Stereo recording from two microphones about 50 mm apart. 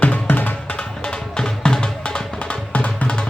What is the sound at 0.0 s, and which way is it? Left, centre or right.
Music, left.